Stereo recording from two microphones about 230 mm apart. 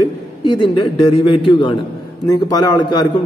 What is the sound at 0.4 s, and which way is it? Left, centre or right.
A man's voice, left.